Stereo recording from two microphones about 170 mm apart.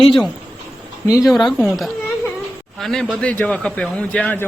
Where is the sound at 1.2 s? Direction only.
Centre (ahead or behind).